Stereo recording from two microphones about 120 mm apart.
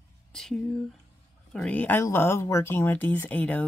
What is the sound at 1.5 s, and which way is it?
Speech, 10° left (ahead or behind).